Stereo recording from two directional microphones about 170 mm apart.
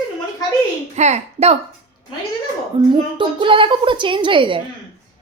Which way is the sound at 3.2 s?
30° right (ahead or behind).